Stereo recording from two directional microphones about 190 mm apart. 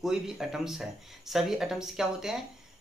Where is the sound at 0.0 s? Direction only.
Centre (ahead or behind).